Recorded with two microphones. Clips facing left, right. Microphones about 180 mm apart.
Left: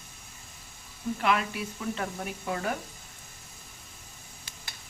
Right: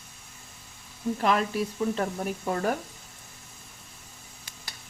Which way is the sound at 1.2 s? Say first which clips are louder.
Right 3 dB; 40° right (ahead or behind).